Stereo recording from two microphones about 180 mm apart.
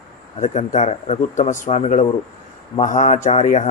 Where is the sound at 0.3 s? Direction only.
45° left (ahead or behind).